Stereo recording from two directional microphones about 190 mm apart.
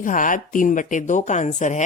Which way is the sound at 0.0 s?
45° left (ahead or behind).